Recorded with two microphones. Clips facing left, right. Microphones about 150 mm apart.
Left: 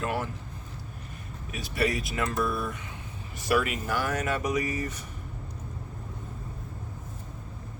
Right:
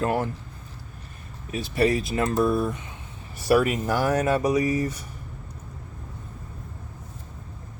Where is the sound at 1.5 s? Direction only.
30° right (ahead or behind).